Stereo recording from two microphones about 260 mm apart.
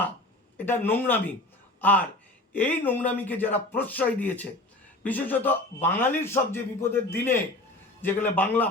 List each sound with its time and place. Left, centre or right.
0.5 s a man's voice: centre